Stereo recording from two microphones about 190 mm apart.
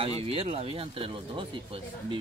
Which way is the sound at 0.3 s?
30° right (ahead or behind).